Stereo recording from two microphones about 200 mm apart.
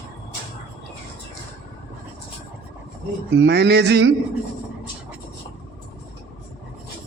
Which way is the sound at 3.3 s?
60° right (ahead or behind).